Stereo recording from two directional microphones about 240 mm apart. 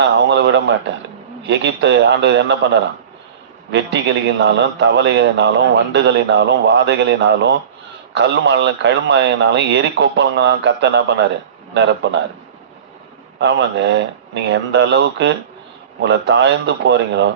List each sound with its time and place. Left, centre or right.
0.0 s a man's voice: right
3.7 s a man's voice: right
13.4 s a man's voice: right